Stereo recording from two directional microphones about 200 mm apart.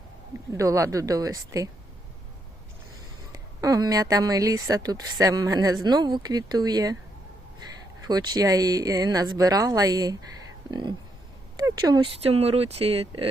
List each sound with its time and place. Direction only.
0.5 s speech: 15° right (ahead or behind)
3.3 s a woman's voice: 15° right (ahead or behind)
8.0 s a woman's voice: 20° right (ahead or behind)
11.5 s a sound: 20° right (ahead or behind)
12.2 s a woman's voice: 30° right (ahead or behind)